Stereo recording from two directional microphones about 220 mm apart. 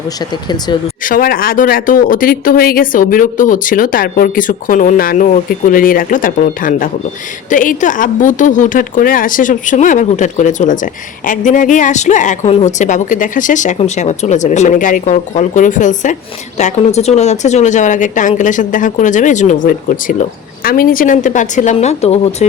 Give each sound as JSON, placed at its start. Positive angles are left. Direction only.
{"t": 1.0, "sound": "speech", "side_deg": 40}